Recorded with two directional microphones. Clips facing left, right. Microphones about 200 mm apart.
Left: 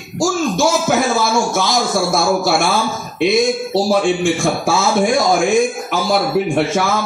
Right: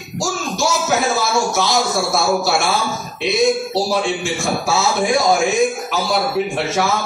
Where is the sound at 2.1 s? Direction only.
55° left (ahead or behind).